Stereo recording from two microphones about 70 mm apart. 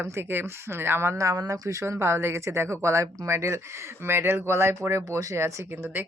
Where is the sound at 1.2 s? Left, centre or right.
Right.